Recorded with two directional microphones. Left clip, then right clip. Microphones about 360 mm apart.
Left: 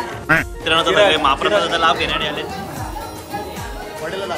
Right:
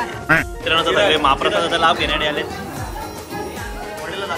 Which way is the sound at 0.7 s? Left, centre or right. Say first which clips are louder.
Left 2 dB; centre.